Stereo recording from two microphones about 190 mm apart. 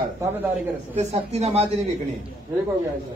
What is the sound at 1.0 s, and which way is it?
Speech, 35° right (ahead or behind).